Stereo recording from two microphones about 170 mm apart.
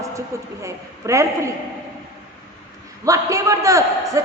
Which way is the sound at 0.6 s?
20° right (ahead or behind).